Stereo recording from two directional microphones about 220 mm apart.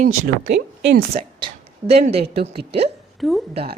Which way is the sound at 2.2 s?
45° right (ahead or behind).